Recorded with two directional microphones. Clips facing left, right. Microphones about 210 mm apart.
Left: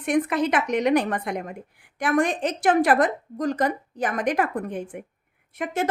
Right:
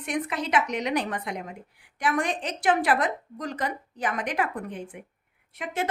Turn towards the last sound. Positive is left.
turn(degrees=45)  # may be behind; listen again after turning